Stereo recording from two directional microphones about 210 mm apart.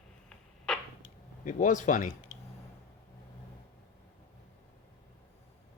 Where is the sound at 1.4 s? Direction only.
35° left (ahead or behind).